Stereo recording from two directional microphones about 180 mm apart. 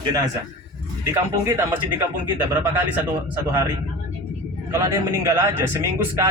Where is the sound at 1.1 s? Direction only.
15° right (ahead or behind).